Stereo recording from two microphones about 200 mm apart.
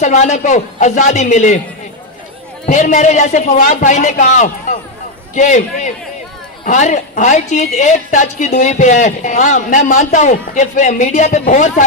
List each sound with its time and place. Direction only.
0.0 s a woman's voice: 35° left (ahead or behind)
2.6 s a woman's voice: 40° left (ahead or behind)